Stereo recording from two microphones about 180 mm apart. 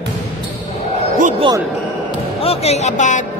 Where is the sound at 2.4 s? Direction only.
35° left (ahead or behind).